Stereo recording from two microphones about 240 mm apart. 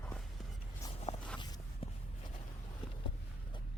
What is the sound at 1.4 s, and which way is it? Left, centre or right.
Walk, centre.